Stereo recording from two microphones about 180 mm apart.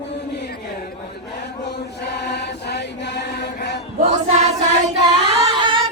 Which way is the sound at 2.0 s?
65° left (ahead or behind).